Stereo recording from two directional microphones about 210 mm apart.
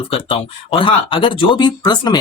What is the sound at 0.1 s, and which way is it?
Speech, 25° left (ahead or behind).